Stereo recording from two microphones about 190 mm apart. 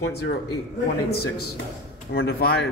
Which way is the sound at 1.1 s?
55° left (ahead or behind).